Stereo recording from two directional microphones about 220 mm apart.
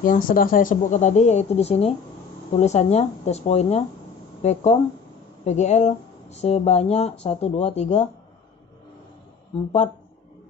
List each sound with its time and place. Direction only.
0.0 s speech: 40° left (ahead or behind)